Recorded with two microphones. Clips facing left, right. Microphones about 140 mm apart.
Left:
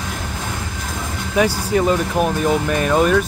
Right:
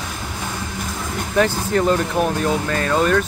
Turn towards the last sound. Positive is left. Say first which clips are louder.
# left 2 dB
turn(degrees=10)  # may be behind; listen again after turning